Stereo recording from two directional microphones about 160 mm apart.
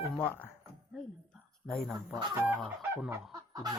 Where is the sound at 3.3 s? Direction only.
25° right (ahead or behind).